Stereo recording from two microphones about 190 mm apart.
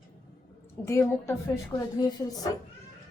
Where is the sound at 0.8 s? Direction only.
15° left (ahead or behind).